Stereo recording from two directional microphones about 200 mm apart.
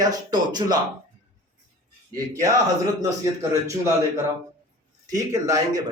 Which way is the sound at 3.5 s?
15° right (ahead or behind).